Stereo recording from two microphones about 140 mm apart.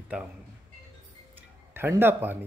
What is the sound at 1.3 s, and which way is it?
Music, 15° right (ahead or behind).